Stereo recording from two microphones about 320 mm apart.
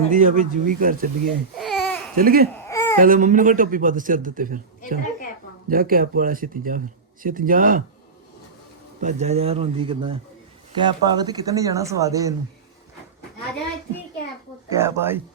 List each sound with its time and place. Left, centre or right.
0.1 s speech: right
1.5 s babbling: centre
2.1 s speech: right
2.6 s babbling: centre
3.0 s speech: right
4.8 s a woman's voice: left
5.6 s speech: right
9.0 s speech: right
14.7 s speech: centre